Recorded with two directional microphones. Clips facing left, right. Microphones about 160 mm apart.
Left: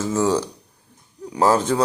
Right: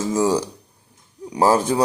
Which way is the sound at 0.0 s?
10° right (ahead or behind).